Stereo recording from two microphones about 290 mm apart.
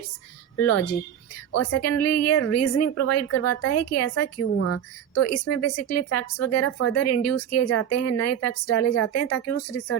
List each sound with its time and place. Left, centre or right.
0.6 s a woman's voice: left